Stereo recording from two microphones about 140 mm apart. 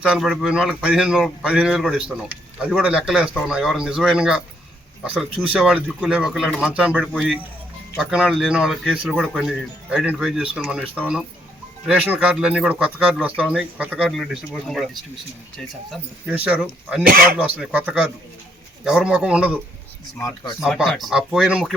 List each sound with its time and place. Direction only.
0.0 s speech: 5° right (ahead or behind)
16.3 s speech: 10° right (ahead or behind)
20.1 s speech: 25° left (ahead or behind)
20.6 s speech: 5° right (ahead or behind)